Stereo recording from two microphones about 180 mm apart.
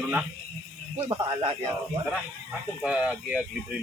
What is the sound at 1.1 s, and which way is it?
Speech, 25° right (ahead or behind).